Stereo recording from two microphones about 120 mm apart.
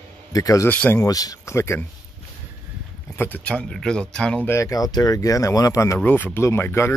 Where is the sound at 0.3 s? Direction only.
30° left (ahead or behind).